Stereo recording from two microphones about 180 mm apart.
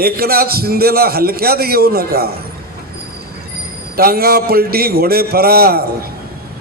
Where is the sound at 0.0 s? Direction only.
55° right (ahead or behind).